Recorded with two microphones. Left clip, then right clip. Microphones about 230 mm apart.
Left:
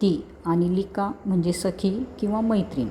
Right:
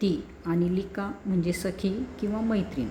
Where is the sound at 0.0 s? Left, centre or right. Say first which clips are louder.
Left 5 dB; centre.